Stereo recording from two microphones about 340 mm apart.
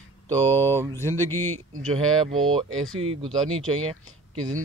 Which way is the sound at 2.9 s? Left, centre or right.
Centre.